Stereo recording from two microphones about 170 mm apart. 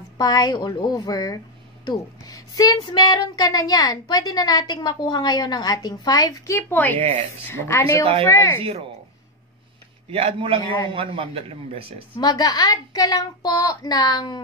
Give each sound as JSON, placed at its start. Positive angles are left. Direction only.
{"t": 0.2, "sound": "speech", "side_deg": 25}
{"t": 10.0, "sound": "speech", "side_deg": -35}
{"t": 12.2, "sound": "speech", "side_deg": 25}